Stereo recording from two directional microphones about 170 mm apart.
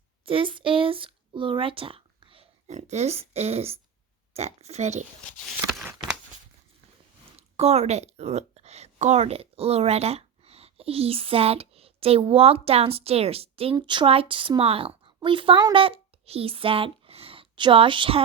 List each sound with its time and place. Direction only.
0.3 s speech: 30° right (ahead or behind)
7.5 s a woman's voice: 40° right (ahead or behind)